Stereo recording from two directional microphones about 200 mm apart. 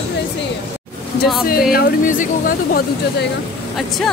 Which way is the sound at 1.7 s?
45° left (ahead or behind).